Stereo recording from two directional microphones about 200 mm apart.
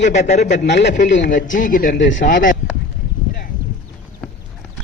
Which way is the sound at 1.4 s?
40° left (ahead or behind).